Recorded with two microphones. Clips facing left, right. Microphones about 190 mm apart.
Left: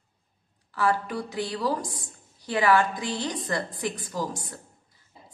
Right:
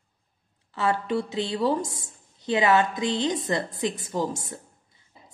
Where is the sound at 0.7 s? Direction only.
25° right (ahead or behind).